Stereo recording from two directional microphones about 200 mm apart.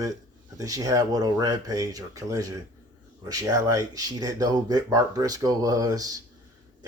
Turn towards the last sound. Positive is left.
turn(degrees=-15)  # may be behind; listen again after turning